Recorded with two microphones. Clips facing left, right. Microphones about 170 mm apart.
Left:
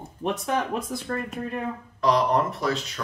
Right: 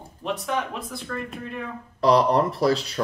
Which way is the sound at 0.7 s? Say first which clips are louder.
Left 4 dB; 45° left (ahead or behind).